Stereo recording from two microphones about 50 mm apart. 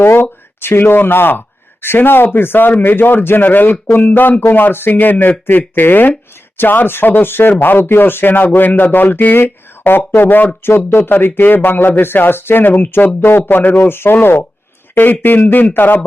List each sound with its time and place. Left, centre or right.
0.0 s speech: left
11.1 s speech: left